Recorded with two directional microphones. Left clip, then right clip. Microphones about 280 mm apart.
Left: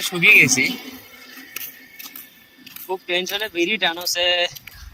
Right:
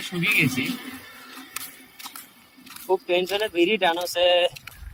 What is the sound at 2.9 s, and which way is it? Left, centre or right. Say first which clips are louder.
Speech: right 1 dB; right.